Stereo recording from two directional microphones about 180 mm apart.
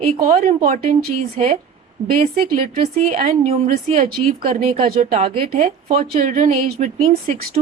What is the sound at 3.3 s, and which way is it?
Speech, 35° right (ahead or behind).